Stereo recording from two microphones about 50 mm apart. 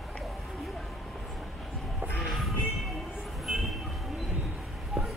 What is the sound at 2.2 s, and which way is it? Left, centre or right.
Train, centre.